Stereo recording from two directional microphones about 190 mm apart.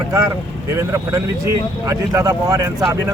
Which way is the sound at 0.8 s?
15° right (ahead or behind).